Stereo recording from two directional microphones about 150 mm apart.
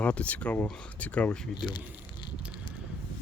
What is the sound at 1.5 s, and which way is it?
Speech, 30° left (ahead or behind).